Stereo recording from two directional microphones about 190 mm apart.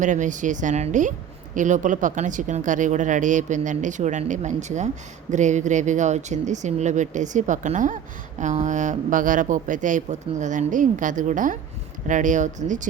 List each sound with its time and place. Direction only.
0.0 s speech: 40° right (ahead or behind)